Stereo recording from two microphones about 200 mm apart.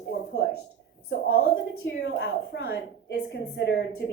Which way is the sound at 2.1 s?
60° left (ahead or behind).